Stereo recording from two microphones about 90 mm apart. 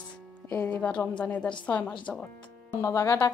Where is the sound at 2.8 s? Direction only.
35° left (ahead or behind).